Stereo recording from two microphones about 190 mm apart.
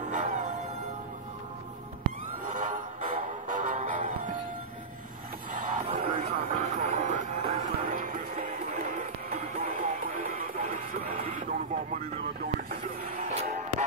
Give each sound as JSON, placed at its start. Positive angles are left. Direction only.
{"t": 0.0, "sound": "music", "side_deg": -40}
{"t": 2.4, "sound": "music", "side_deg": -45}
{"t": 5.5, "sound": "music", "side_deg": -45}
{"t": 11.3, "sound": "radio", "side_deg": -40}